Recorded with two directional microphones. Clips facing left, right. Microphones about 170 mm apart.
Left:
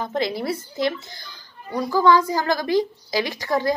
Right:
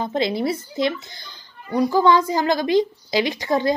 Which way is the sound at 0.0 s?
20° right (ahead or behind).